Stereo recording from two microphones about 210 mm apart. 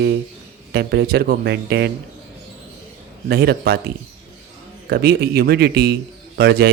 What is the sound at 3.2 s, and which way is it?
Speech, 50° right (ahead or behind).